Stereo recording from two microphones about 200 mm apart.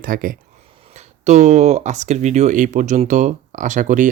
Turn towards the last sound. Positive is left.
turn(degrees=-40)  # may be behind; listen again after turning